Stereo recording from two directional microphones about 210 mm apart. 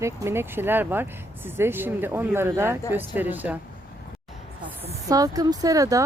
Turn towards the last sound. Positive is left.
turn(degrees=-15)  # may be behind; listen again after turning